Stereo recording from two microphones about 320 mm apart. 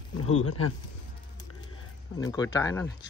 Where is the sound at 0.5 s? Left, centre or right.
Left.